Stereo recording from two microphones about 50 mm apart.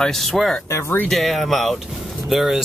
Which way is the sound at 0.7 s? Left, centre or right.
Left.